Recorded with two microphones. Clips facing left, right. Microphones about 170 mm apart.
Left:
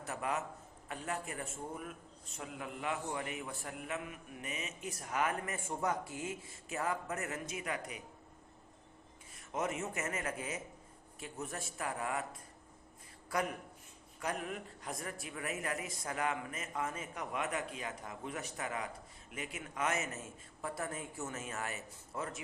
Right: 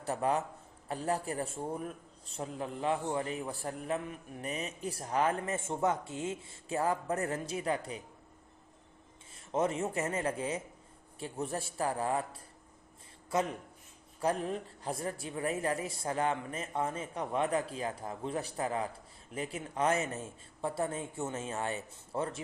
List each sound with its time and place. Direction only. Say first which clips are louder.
0.0 s a man's voice: right 6 dB; 30° right (ahead or behind)
9.5 s a man's voice: right 6 dB; 30° right (ahead or behind)